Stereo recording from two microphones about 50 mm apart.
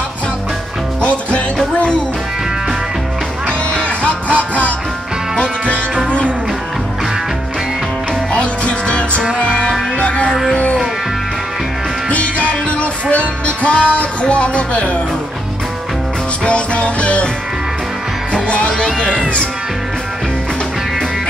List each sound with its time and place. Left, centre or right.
1.0 s music: left
3.7 s music: left
8.3 s music: left
12.1 s music: left
16.4 s music: left
18.3 s speech: left